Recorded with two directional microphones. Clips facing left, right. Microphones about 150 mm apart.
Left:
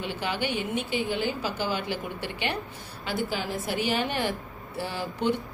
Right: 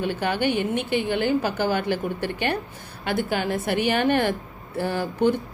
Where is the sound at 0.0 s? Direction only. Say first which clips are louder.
Right 6 dB; 50° right (ahead or behind).